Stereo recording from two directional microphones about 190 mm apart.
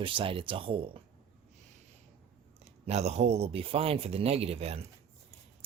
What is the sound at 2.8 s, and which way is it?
Speech, 35° right (ahead or behind).